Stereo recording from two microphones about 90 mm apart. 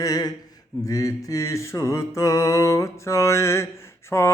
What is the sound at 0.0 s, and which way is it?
Speech, 45° left (ahead or behind).